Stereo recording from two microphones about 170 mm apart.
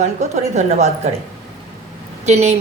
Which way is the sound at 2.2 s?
40° right (ahead or behind).